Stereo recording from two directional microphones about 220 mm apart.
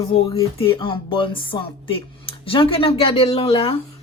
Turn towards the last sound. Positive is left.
turn(degrees=25)  # may be behind; listen again after turning